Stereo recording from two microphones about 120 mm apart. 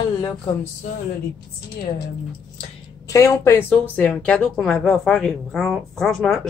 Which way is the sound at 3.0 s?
25° left (ahead or behind).